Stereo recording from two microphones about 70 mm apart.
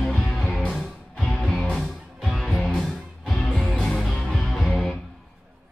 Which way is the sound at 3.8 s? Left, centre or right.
Centre.